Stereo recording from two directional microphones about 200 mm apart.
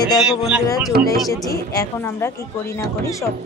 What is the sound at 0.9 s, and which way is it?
Speech, 50° right (ahead or behind).